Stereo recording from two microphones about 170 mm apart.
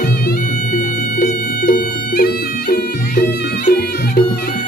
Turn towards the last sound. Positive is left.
turn(degrees=65)  # may be behind; listen again after turning